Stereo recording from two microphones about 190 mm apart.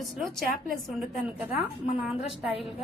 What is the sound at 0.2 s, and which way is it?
A woman's voice, centre (ahead or behind).